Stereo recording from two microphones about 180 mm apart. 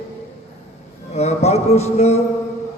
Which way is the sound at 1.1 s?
35° left (ahead or behind).